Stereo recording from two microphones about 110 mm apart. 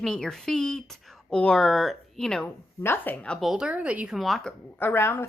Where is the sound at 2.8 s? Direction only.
20° left (ahead or behind).